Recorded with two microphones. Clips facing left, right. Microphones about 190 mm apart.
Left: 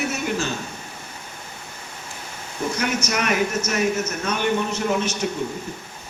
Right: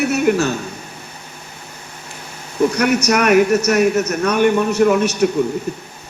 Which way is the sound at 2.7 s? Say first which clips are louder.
Right 8 dB; 65° right (ahead or behind).